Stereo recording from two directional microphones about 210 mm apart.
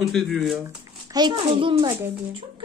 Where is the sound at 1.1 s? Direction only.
20° right (ahead or behind).